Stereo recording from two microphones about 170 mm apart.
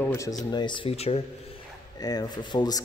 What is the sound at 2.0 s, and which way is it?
Speech, 20° left (ahead or behind).